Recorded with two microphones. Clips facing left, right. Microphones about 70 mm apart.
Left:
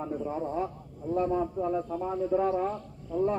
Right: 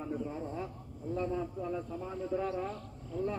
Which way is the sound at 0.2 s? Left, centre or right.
Left.